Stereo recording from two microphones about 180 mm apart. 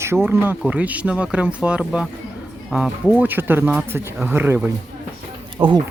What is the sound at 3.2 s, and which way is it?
Speech, 10° right (ahead or behind).